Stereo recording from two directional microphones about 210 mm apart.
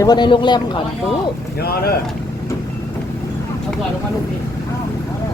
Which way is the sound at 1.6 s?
45° left (ahead or behind).